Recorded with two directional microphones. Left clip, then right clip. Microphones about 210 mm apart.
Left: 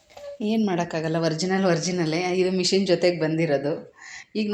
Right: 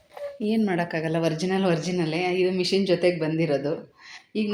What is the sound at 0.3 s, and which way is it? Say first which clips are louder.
A woman's voice: left 1 dB; 5° left (ahead or behind).